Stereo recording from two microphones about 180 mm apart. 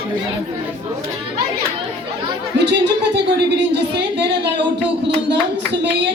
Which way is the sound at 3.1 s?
70° right (ahead or behind).